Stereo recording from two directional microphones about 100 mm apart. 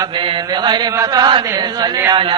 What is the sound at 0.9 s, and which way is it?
A man's voice, 35° right (ahead or behind).